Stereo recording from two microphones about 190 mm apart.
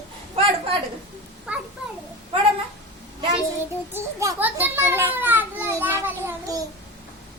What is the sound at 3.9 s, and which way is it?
Children playing, 15° right (ahead or behind).